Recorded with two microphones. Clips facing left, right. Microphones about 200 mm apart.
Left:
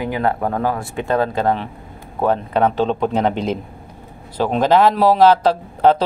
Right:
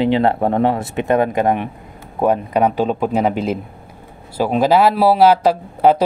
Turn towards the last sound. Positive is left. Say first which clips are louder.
# right 1 dB
turn(degrees=-10)  # may be behind; listen again after turning